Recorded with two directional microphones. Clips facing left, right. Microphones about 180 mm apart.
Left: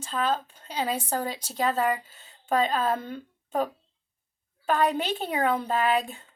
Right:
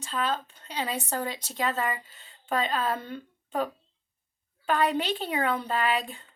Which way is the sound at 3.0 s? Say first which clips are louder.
Left 2 dB; 45° left (ahead or behind).